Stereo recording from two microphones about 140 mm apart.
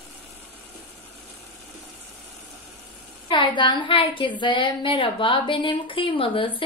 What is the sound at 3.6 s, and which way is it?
A woman's voice, 35° left (ahead or behind).